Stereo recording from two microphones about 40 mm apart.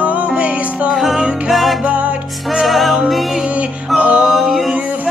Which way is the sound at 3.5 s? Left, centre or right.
Right.